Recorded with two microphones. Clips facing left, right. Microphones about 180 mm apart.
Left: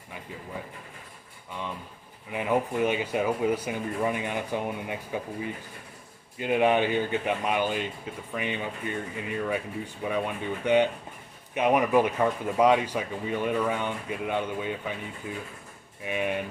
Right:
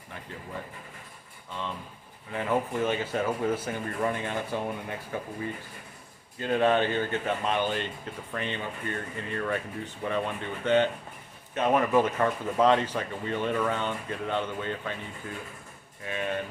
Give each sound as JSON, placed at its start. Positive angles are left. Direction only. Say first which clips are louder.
{"t": 2.3, "sound": "speech", "louder": "left 2 dB", "side_deg": 15}
{"t": 16.0, "sound": "speech", "louder": "left 3 dB", "side_deg": 15}